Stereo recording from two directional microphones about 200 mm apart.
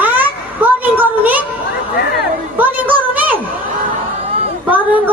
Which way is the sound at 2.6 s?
10° right (ahead or behind).